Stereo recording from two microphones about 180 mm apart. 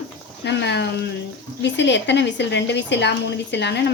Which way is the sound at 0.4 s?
70° left (ahead or behind).